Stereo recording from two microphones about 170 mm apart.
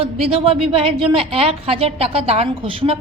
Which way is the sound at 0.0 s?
35° right (ahead or behind).